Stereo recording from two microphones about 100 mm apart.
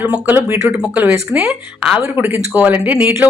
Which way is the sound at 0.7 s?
10° right (ahead or behind).